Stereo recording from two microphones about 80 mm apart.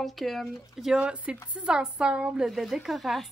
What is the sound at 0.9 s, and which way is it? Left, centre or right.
A woman's voice, centre.